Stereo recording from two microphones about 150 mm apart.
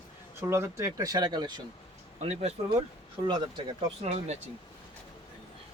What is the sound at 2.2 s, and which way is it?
Speech, 45° right (ahead or behind).